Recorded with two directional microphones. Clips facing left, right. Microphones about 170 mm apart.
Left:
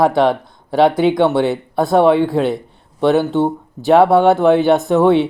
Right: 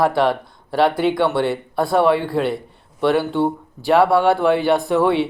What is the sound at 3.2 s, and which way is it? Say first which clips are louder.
Speech: left 3 dB; 20° left (ahead or behind).